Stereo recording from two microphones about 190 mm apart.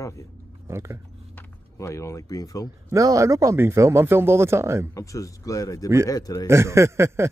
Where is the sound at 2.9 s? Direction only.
15° right (ahead or behind).